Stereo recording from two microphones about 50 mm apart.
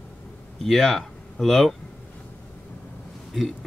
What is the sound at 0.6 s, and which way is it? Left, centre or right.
Speech, centre.